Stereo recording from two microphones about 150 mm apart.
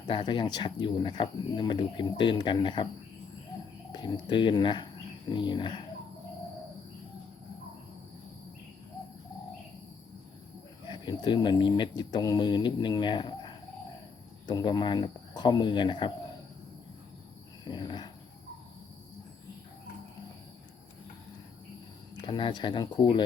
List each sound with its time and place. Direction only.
0.1 s speech: 35° left (ahead or behind)
3.9 s speech: 30° left (ahead or behind)
10.8 s speech: 30° left (ahead or behind)
17.7 s a sound: 30° left (ahead or behind)
22.2 s speech: 30° left (ahead or behind)